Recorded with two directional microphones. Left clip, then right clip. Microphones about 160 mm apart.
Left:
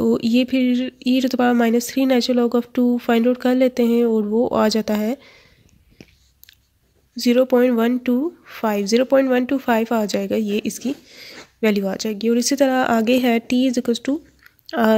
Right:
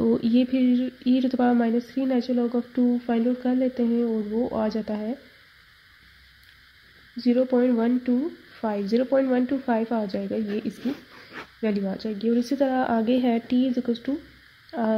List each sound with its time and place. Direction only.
0.0 s speech: 15° left (ahead or behind)
1.6 s speech: 35° left (ahead or behind)
7.2 s a woman's voice: 30° left (ahead or behind)
8.1 s speech: 45° left (ahead or behind)
8.6 s a woman's voice: 25° left (ahead or behind)
14.7 s speech: 35° left (ahead or behind)